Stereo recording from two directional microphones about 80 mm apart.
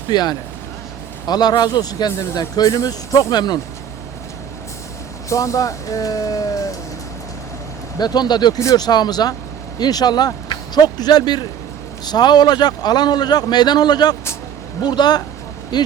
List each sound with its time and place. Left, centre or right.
0.1 s a man's voice: left
3.3 s a man's voice: left
5.3 s a man's voice: left
7.9 s a man's voice: left